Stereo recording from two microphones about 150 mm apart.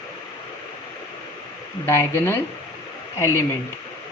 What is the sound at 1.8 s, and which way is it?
Speech, 15° left (ahead or behind).